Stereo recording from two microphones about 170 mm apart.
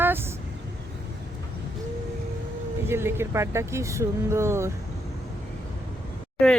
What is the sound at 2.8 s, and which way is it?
Speech, 15° right (ahead or behind).